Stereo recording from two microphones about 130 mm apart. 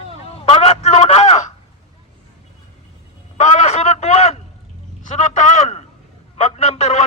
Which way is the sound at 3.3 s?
60° left (ahead or behind).